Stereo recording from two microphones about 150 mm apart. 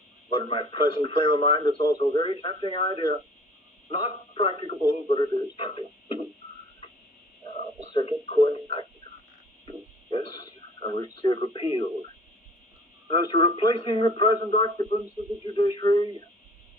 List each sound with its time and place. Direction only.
0.3 s speech: 35° left (ahead or behind)
7.9 s speech: 40° left (ahead or behind)
9.6 s a sound: 35° left (ahead or behind)
11.2 s speech: 30° left (ahead or behind)
13.1 s speech: 25° left (ahead or behind)